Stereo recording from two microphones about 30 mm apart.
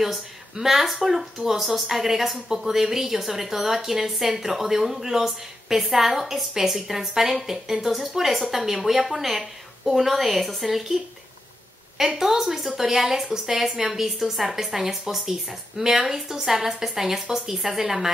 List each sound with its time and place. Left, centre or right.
0.0 s a woman's voice: centre
12.0 s a woman's voice: centre